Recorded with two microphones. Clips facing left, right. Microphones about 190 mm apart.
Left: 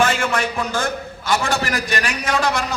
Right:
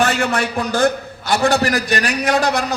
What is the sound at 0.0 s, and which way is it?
A man's voice, 40° right (ahead or behind).